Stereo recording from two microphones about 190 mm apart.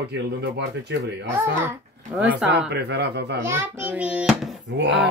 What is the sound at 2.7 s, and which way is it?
Speech, 60° right (ahead or behind).